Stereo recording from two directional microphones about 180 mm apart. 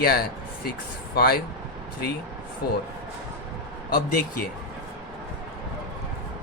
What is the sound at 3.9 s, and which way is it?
Speech, 50° left (ahead or behind).